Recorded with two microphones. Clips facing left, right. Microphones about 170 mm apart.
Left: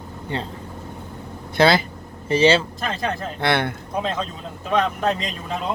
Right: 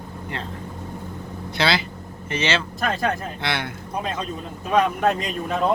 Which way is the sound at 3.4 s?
55° left (ahead or behind).